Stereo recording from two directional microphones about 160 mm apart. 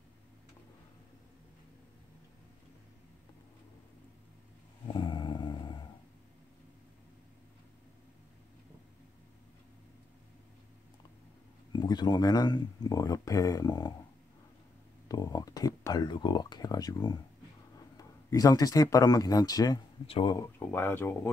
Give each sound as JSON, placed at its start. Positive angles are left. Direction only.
{"t": 4.9, "sound": "dog", "side_deg": 30}
{"t": 11.7, "sound": "speech", "side_deg": 25}
{"t": 15.0, "sound": "speech", "side_deg": 25}
{"t": 20.1, "sound": "speech", "side_deg": 35}
{"t": 20.3, "sound": "speech", "side_deg": 15}